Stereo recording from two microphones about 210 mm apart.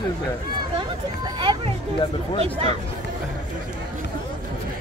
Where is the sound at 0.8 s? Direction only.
20° right (ahead or behind).